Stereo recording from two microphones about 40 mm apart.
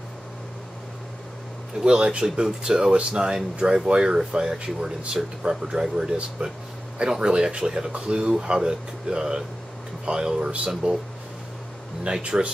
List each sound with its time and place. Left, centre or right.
1.9 s speech: right
12.0 s speech: right